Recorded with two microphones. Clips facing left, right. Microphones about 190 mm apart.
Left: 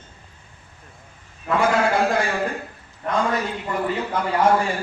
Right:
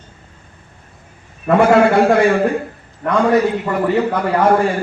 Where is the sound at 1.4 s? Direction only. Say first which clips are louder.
Right 9 dB; 60° right (ahead or behind).